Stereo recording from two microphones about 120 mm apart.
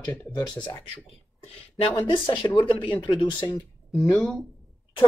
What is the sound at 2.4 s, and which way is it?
Speech, 15° left (ahead or behind).